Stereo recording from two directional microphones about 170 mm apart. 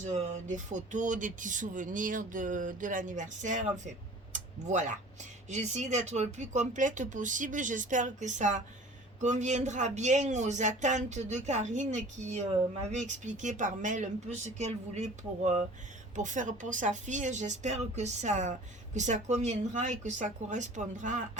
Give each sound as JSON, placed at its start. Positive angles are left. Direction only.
{"t": 0.0, "sound": "speech", "side_deg": -45}